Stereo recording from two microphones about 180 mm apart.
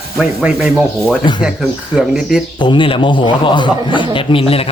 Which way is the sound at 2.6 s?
25° left (ahead or behind).